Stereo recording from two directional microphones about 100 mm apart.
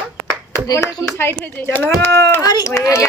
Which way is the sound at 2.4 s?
35° left (ahead or behind).